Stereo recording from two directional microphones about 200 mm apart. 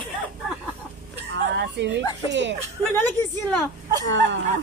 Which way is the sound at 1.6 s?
60° right (ahead or behind).